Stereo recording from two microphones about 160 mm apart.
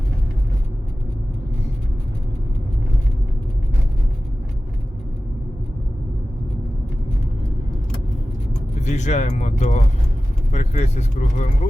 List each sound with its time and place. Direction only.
8.8 s speech: 45° left (ahead or behind)